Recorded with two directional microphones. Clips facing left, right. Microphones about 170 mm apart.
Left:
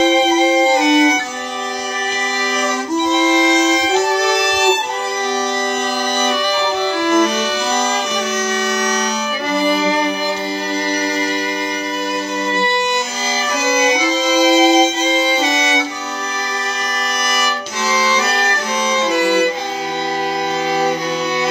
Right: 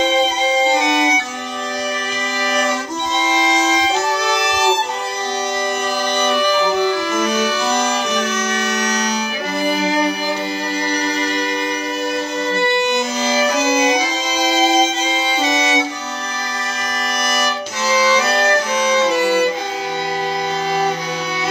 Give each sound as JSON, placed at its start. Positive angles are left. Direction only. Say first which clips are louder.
{"t": 14.5, "sound": "violin", "louder": "left 3 dB", "side_deg": 15}